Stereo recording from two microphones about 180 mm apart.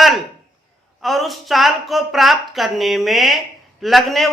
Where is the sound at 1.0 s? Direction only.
Centre (ahead or behind).